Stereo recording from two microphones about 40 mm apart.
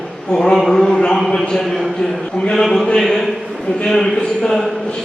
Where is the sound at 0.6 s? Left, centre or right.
Centre.